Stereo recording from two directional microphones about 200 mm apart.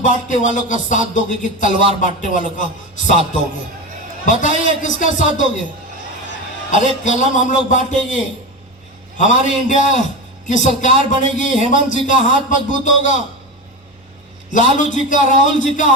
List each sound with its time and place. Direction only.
0.0 s speech: 40° left (ahead or behind)
7.0 s speech: 40° left (ahead or behind)
14.8 s speech: 40° left (ahead or behind)